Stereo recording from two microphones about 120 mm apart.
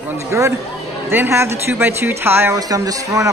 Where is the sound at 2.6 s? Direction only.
30° right (ahead or behind).